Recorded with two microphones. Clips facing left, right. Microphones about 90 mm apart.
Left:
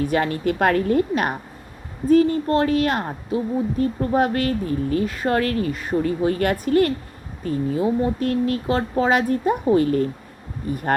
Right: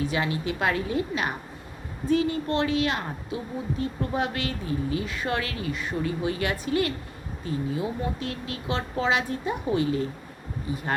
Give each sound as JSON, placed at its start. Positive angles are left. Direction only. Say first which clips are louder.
{"t": 0.0, "sound": "a woman's voice", "louder": "left 6 dB", "side_deg": 50}